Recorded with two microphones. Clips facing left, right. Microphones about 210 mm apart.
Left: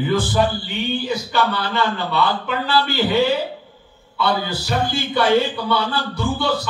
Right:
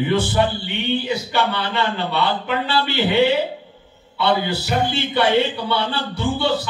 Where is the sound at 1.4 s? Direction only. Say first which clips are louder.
Left 1 dB; 25° right (ahead or behind).